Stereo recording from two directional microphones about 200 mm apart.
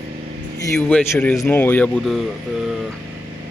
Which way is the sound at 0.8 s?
10° left (ahead or behind).